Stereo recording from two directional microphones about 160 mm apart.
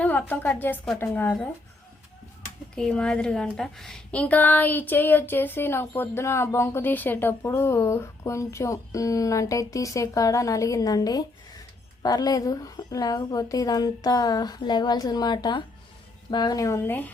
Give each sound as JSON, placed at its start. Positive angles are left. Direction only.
{"t": 0.0, "sound": "a woman's voice", "side_deg": 10}
{"t": 2.7, "sound": "a woman's voice", "side_deg": 5}